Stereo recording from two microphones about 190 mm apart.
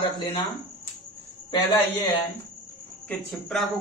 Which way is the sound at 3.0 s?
Centre (ahead or behind).